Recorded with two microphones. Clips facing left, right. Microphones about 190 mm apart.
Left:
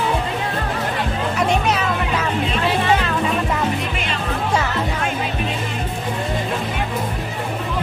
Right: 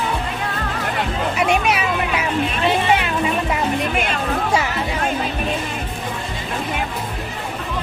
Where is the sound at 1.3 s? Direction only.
10° right (ahead or behind).